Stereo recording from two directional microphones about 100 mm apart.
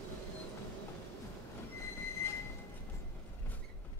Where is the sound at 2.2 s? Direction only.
25° left (ahead or behind).